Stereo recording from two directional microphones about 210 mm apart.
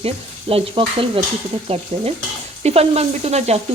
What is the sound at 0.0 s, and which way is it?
Sizzle, 25° right (ahead or behind).